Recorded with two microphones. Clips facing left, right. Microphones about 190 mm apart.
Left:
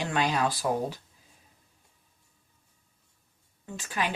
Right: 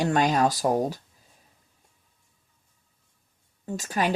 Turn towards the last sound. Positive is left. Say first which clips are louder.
# right 5 dB
turn(degrees=-40)  # may be behind; listen again after turning